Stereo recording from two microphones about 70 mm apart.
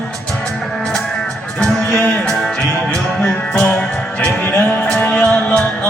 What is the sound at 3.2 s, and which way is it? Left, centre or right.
Music, centre.